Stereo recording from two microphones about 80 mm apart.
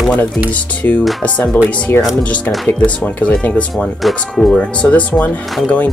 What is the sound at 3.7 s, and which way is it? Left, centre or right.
Speech, centre.